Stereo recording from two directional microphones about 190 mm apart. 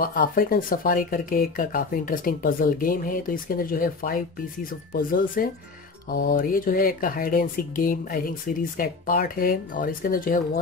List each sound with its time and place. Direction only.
0.0 s speech: 50° left (ahead or behind)